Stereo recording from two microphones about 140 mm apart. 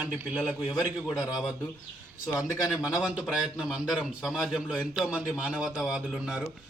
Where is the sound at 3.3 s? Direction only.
5° right (ahead or behind).